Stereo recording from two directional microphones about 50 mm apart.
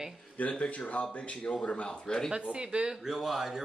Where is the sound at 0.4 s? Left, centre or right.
Left.